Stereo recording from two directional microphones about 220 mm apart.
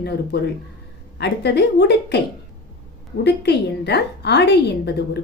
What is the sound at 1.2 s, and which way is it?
Speech, 50° left (ahead or behind).